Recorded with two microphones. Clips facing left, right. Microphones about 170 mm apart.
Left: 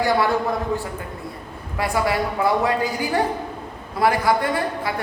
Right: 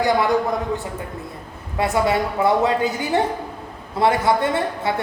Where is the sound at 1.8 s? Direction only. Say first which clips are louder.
Right 2 dB; 25° right (ahead or behind).